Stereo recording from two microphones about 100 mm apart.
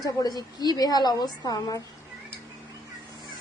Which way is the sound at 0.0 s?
40° left (ahead or behind).